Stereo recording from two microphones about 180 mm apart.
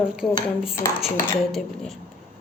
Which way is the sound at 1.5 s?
Centre (ahead or behind).